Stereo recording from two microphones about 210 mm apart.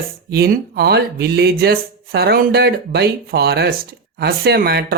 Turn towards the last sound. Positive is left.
turn(degrees=-50)  # may be behind; listen again after turning